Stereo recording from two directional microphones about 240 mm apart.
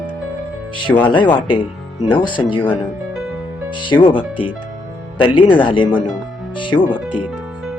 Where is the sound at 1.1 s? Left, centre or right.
Centre.